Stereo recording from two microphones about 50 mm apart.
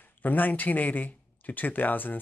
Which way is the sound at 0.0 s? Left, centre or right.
Left.